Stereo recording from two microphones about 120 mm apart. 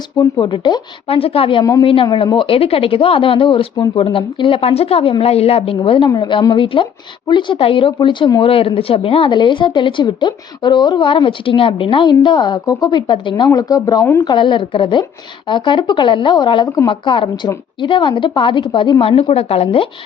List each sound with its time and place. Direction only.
0.3 s speech: 40° left (ahead or behind)
2.0 s speech: 35° left (ahead or behind)
6.1 s speech: 40° left (ahead or behind)
14.3 s speech: 40° left (ahead or behind)
16.6 s a woman's voice: 30° left (ahead or behind)
16.9 s speech: 40° left (ahead or behind)